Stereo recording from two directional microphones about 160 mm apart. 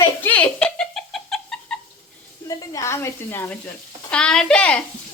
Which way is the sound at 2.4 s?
20° left (ahead or behind).